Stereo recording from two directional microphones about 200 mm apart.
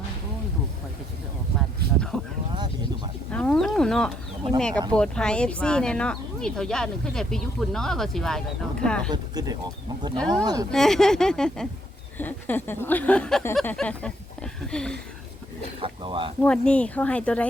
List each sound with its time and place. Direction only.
1.5 s a sound: centre (ahead or behind)
3.3 s a sound: 5° left (ahead or behind)
4.9 s speech: 5° left (ahead or behind)
9.0 s speech: 20° right (ahead or behind)
10.2 s speech: 5° left (ahead or behind)
10.4 s speech: 20° right (ahead or behind)
10.7 s speech: centre (ahead or behind)
15.8 s speech: 25° right (ahead or behind)
16.4 s speech: 5° left (ahead or behind)